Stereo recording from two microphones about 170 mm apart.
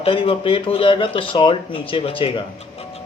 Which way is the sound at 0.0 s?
30° left (ahead or behind).